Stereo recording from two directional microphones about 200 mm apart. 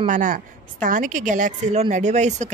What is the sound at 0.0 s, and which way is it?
Speech, 40° right (ahead or behind).